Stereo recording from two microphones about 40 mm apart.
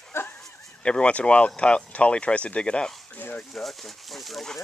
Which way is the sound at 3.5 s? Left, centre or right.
Centre.